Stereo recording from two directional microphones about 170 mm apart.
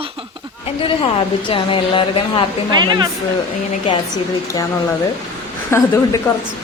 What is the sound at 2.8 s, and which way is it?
Speech, 25° right (ahead or behind).